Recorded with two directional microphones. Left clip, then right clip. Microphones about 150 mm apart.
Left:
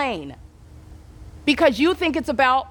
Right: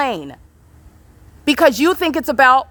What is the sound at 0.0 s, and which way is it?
Speech, 25° right (ahead or behind).